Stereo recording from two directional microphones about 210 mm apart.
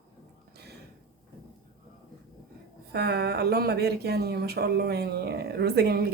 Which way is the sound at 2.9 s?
50° right (ahead or behind).